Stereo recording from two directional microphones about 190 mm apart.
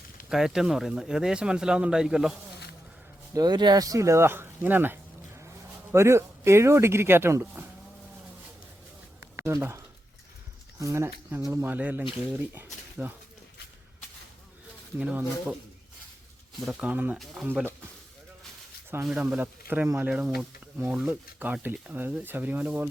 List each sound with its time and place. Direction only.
0.3 s speech: centre (ahead or behind)
3.3 s speech: 20° right (ahead or behind)
9.3 s speech: 15° right (ahead or behind)
14.9 s speech: 5° right (ahead or behind)
16.6 s speech: centre (ahead or behind)
19.0 s speech: 5° right (ahead or behind)